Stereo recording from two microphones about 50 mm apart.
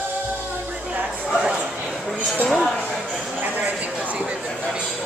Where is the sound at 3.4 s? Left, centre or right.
Right.